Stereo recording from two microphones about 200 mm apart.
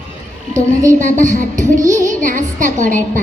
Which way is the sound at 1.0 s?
40° right (ahead or behind).